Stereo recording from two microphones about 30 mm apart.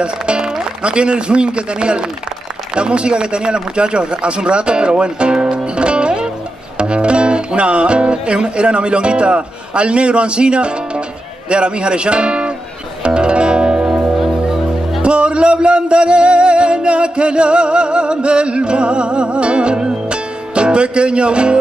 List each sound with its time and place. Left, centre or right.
0.0 s speech: right
5.8 s music: right
8.5 s speech: right
13.0 s music: right
15.0 s music: right